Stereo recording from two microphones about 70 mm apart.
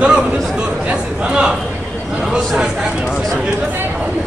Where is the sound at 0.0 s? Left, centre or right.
Centre.